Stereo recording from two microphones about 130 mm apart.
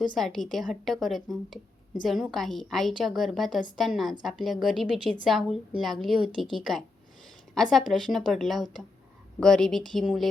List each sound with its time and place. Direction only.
0.2 s a woman's voice: centre (ahead or behind)